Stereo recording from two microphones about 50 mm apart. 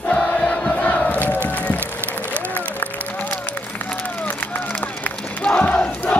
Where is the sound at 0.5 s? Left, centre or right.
Left.